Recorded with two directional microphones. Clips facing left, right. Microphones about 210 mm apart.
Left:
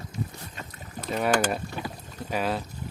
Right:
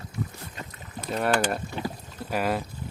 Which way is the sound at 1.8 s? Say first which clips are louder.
Right 3 dB; 25° right (ahead or behind).